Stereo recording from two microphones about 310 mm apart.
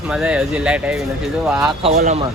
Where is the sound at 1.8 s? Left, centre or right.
Right.